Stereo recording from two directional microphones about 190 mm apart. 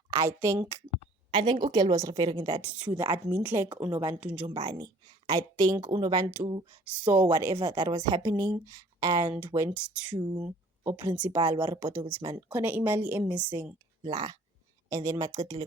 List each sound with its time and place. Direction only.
0.1 s a woman's voice: 15° right (ahead or behind)
0.9 s a sound: 30° right (ahead or behind)
1.6 s a woman's voice: 20° right (ahead or behind)
4.6 s a woman's voice: 20° right (ahead or behind)
9.7 s a woman's voice: 5° right (ahead or behind)
10.2 s a woman's voice: 20° right (ahead or behind)
14.0 s a woman's voice: 20° right (ahead or behind)